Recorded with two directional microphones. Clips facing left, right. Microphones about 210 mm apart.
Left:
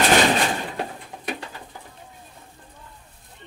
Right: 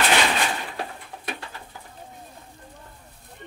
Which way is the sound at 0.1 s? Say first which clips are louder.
Left 4 dB; 40° left (ahead or behind).